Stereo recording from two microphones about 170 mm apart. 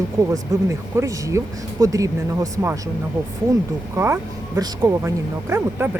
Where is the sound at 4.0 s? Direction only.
20° right (ahead or behind).